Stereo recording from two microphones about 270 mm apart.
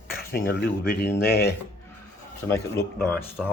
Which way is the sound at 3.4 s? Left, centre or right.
Centre.